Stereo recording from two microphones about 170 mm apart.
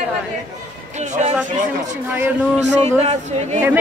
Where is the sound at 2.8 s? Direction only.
40° right (ahead or behind).